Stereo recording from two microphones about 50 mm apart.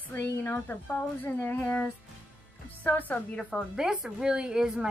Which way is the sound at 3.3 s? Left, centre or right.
Centre.